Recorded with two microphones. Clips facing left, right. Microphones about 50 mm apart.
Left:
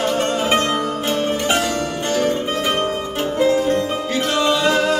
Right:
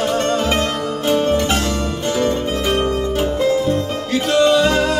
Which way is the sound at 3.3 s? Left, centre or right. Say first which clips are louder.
Left 3 dB; centre.